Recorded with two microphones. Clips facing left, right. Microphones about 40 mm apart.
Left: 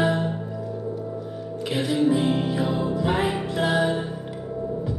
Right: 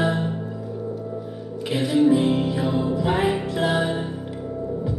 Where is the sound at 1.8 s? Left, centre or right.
Right.